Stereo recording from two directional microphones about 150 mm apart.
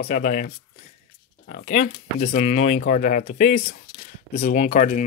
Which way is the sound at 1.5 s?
55° left (ahead or behind).